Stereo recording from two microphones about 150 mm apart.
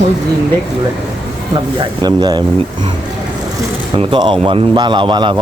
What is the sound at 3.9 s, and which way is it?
A man's voice, 35° right (ahead or behind).